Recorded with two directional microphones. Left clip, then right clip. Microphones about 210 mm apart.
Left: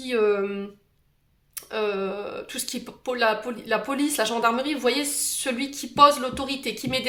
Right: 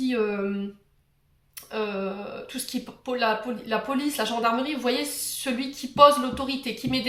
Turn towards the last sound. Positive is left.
turn(degrees=55)  # may be behind; listen again after turning